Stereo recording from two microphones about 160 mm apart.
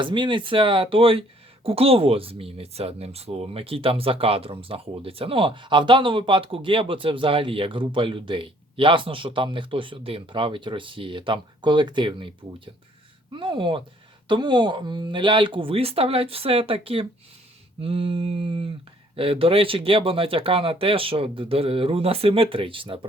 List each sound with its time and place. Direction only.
0.0 s speech: 30° right (ahead or behind)